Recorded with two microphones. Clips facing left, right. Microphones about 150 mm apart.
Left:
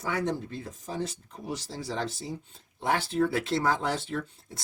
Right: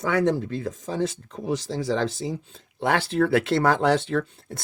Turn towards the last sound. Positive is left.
turn(degrees=-90)